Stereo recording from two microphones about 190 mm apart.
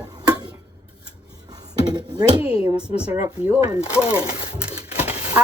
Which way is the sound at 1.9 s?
20° right (ahead or behind).